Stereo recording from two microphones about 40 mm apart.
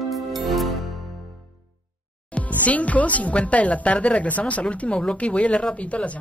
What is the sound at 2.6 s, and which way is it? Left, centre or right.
Speech, left.